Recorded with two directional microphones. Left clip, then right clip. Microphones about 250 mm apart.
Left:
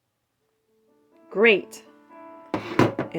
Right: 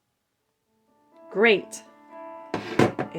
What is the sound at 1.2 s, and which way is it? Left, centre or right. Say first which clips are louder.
Speech: left 2 dB; centre.